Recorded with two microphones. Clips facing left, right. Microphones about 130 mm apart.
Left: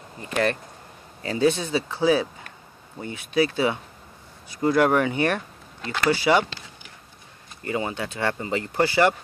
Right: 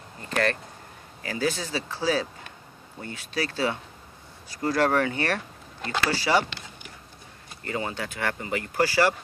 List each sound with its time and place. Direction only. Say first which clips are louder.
0.2 s speech: left 2 dB; 20° left (ahead or behind)
7.6 s speech: left 3 dB; 20° left (ahead or behind)